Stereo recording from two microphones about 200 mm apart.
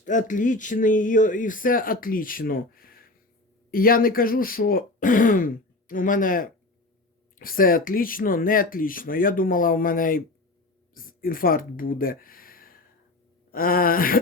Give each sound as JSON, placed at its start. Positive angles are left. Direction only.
{"t": 0.0, "sound": "speech", "side_deg": 40}